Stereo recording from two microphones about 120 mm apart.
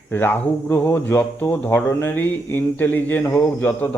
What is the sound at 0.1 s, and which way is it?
Speech, 20° left (ahead or behind).